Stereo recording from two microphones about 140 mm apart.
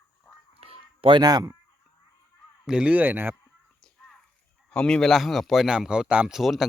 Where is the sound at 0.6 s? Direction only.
40° right (ahead or behind).